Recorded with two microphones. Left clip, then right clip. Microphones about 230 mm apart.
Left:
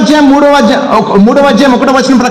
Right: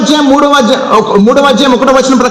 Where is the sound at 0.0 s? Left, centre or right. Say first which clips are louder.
Left 2 dB; left.